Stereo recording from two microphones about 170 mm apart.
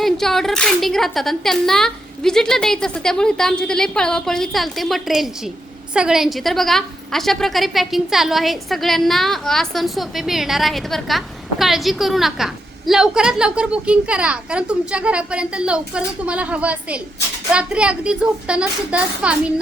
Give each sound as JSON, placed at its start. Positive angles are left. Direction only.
{"t": 0.0, "sound": "a woman's voice", "side_deg": 0}